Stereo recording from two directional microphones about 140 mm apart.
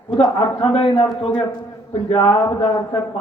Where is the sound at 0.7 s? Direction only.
40° left (ahead or behind).